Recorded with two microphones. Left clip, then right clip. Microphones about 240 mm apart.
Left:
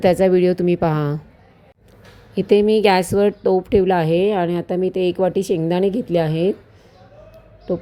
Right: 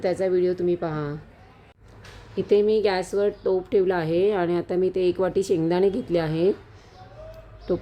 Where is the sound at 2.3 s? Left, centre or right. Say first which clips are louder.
Left 5 dB; left.